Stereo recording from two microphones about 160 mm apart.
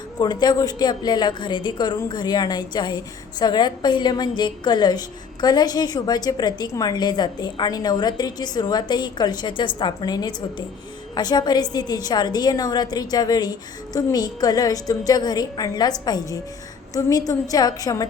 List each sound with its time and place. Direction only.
0.2 s a woman's voice: 25° left (ahead or behind)